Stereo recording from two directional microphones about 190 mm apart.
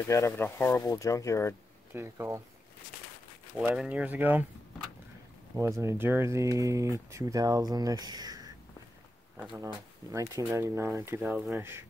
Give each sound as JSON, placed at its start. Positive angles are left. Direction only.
{"t": 0.1, "sound": "speech", "side_deg": 15}
{"t": 2.0, "sound": "speech", "side_deg": -15}
{"t": 3.5, "sound": "speech", "side_deg": -5}
{"t": 5.6, "sound": "speech", "side_deg": -15}
{"t": 10.1, "sound": "speech", "side_deg": -15}
{"t": 11.2, "sound": "speech", "side_deg": 0}
{"t": 11.5, "sound": "speech", "side_deg": -10}